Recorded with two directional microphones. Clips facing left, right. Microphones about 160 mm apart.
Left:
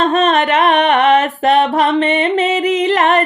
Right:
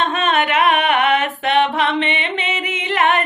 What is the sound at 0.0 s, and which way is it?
Music, 40° left (ahead or behind).